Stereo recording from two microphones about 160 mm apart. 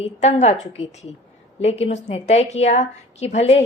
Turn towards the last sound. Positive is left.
turn(degrees=45)  # may be behind; listen again after turning